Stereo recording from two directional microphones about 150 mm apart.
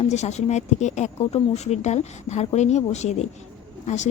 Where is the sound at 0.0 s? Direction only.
50° left (ahead or behind).